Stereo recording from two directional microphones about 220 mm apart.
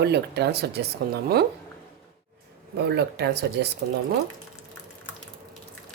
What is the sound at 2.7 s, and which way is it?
Speech, 50° right (ahead or behind).